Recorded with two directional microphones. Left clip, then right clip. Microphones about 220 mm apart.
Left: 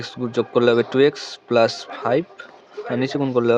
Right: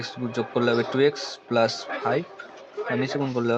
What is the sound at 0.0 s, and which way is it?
Speech, 40° left (ahead or behind).